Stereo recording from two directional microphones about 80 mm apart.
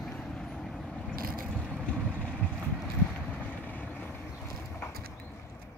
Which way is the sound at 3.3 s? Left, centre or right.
Centre.